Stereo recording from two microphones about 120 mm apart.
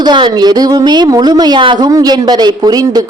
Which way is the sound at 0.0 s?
40° right (ahead or behind).